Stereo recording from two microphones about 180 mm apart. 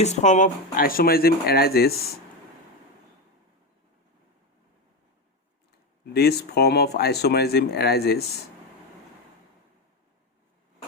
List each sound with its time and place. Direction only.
0.0 s speech: 40° left (ahead or behind); by 2.0 s 60° left (ahead or behind)
6.1 s speech: 60° left (ahead or behind)